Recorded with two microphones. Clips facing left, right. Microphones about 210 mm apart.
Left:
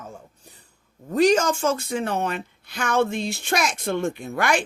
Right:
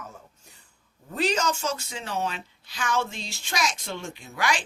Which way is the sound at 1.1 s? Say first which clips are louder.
Left 8 dB; 50° left (ahead or behind).